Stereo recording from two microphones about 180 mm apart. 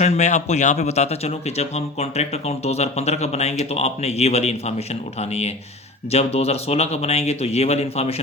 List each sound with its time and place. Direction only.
0.0 s speech: 40° left (ahead or behind)
6.1 s speech: 35° left (ahead or behind)